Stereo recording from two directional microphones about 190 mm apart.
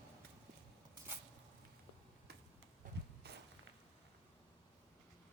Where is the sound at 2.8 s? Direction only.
45° right (ahead or behind).